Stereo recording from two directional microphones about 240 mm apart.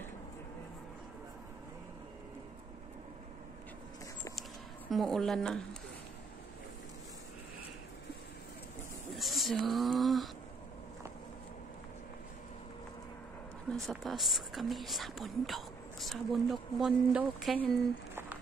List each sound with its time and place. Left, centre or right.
4.9 s speech: centre
9.1 s a sound: centre
13.7 s speech: centre